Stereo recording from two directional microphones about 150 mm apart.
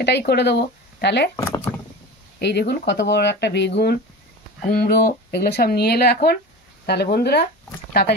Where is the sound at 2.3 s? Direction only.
90° left.